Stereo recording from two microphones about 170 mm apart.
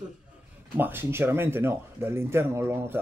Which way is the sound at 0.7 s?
10° right (ahead or behind).